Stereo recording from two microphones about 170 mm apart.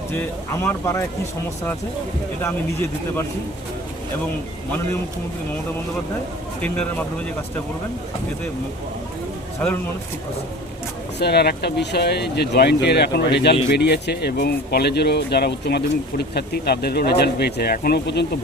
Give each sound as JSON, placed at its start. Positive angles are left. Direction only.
{"t": 0.1, "sound": "speech", "side_deg": 15}
{"t": 11.2, "sound": "speech", "side_deg": 70}